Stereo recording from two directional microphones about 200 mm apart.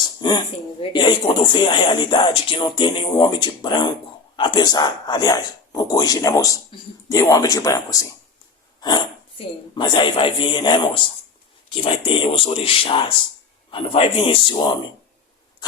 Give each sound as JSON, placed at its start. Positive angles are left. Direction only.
{"t": 0.2, "sound": "speech", "side_deg": 20}
{"t": 8.8, "sound": "hiccup", "side_deg": 20}
{"t": 9.7, "sound": "speech", "side_deg": 25}